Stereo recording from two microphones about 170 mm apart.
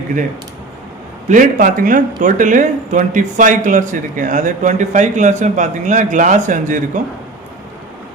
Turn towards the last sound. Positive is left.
turn(degrees=-50)  # may be behind; listen again after turning